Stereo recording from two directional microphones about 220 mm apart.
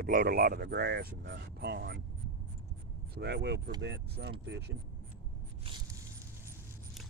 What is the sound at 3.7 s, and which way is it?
Mechanisms, 55° right (ahead or behind).